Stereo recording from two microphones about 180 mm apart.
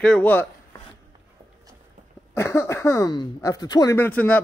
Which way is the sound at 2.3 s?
15° left (ahead or behind).